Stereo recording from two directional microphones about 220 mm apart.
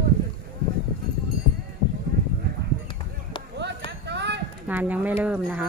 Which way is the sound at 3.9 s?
50° right (ahead or behind).